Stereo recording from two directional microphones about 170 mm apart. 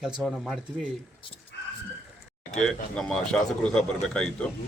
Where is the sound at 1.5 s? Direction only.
80° left.